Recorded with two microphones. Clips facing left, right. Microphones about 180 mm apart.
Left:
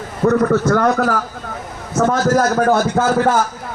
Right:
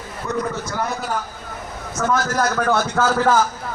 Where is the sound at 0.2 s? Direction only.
50° left (ahead or behind).